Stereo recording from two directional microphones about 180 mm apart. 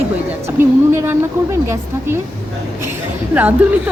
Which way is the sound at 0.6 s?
15° right (ahead or behind).